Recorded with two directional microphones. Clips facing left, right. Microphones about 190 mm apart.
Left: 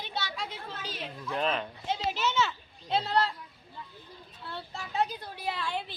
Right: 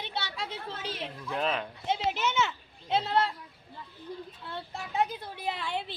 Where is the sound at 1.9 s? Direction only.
20° right (ahead or behind).